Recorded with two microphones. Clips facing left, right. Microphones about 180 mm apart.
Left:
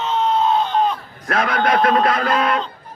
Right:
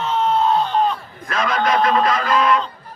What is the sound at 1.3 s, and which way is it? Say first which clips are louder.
A man's voice: left 1 dB; 60° left (ahead or behind).